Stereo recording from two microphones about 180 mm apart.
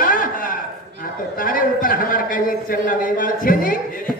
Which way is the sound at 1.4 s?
50° left (ahead or behind).